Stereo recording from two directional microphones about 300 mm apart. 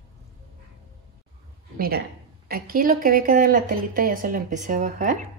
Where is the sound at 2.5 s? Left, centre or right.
Right.